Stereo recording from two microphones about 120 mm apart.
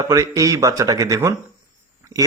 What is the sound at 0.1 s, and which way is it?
A man's voice, 25° right (ahead or behind).